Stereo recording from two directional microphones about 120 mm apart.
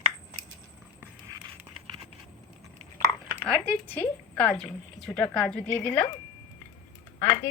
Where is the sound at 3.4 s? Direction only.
10° left (ahead or behind).